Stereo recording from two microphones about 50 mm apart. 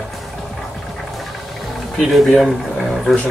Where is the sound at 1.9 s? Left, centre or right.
Centre.